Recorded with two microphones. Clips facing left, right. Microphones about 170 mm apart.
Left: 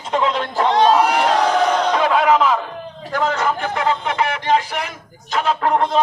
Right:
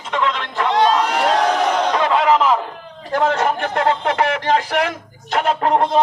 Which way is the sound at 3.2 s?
55° right (ahead or behind).